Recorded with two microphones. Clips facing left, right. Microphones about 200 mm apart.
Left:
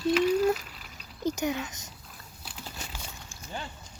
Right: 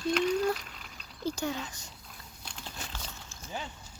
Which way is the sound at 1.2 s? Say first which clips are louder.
Left 4 dB; 20° left (ahead or behind).